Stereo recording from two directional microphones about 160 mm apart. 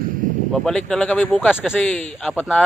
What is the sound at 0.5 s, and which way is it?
Speech, 5° left (ahead or behind).